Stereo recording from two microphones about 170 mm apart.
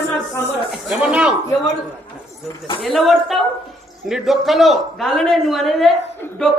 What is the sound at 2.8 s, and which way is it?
A man's voice, centre (ahead or behind).